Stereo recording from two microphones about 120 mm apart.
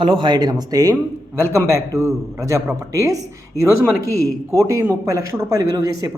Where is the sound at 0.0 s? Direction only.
40° right (ahead or behind); by 3.2 s 25° right (ahead or behind).